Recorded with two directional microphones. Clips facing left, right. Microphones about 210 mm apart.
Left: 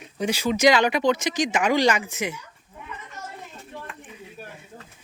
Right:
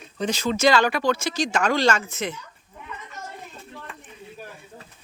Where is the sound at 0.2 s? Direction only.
10° left (ahead or behind).